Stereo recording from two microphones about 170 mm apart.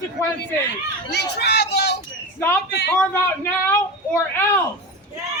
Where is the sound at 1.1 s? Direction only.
80° left.